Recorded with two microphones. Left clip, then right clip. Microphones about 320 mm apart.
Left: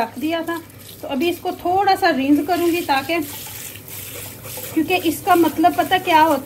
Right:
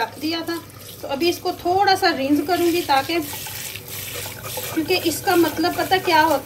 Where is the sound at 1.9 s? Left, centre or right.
Centre.